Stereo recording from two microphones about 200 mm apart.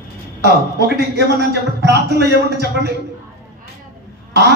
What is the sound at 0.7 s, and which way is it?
A man's voice, 55° right (ahead or behind).